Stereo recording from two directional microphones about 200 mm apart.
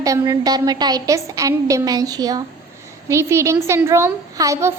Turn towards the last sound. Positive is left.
turn(degrees=-15)  # may be behind; listen again after turning